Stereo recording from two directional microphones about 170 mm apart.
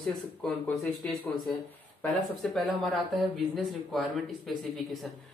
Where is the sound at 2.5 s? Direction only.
Centre (ahead or behind).